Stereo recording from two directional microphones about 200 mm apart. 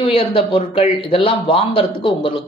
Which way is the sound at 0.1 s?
25° left (ahead or behind).